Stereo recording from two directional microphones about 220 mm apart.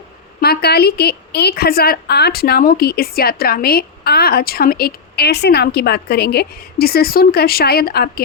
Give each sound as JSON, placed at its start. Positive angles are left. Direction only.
{"t": 0.4, "sound": "a woman's voice", "side_deg": 45}